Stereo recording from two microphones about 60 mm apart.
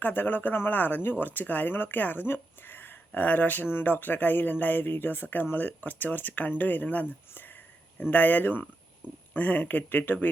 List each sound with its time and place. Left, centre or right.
0.0 s speech: left